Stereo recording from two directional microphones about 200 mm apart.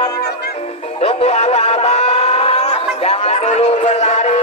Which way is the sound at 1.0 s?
30° left (ahead or behind).